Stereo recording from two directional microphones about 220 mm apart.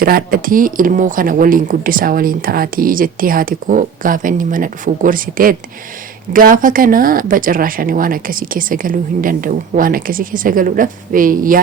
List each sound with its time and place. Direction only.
0.0 s speech: 40° right (ahead or behind)